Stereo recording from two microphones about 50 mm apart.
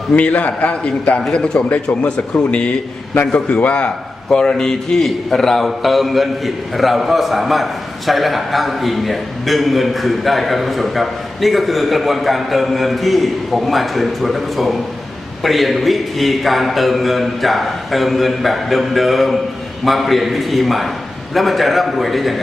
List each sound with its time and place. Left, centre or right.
0.1 s a man's voice: left
1.7 s a man's voice: left
4.3 s a man's voice: centre